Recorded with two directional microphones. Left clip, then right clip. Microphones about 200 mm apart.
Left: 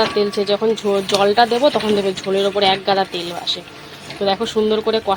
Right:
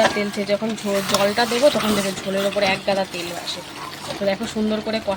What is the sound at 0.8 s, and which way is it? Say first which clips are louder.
Speech: left 2 dB; 15° left (ahead or behind).